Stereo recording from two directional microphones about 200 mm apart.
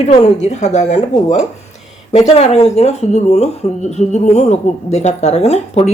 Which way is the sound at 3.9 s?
35° left (ahead or behind).